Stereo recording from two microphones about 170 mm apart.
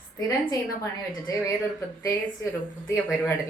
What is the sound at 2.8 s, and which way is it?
Speech, 15° left (ahead or behind).